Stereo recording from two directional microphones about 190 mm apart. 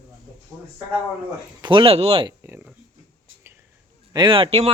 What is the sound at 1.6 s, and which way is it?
Speech, 25° right (ahead or behind).